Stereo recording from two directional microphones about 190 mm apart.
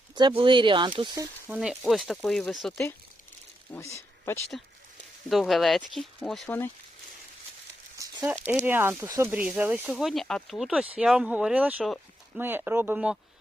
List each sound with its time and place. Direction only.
0.2 s speech: 25° right (ahead or behind)
1.5 s speech: 5° right (ahead or behind)
3.7 s speech: 15° left (ahead or behind)
5.3 s speech: centre (ahead or behind)
7.9 s a sound: 15° right (ahead or behind)
8.6 s speech: 10° right (ahead or behind)